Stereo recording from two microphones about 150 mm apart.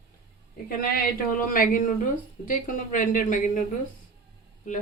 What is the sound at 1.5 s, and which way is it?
Speech, 65° left (ahead or behind).